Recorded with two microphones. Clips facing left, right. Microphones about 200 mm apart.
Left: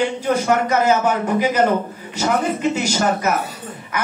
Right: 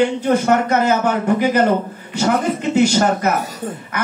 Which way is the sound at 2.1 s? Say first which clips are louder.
Right 2 dB; 60° right (ahead or behind).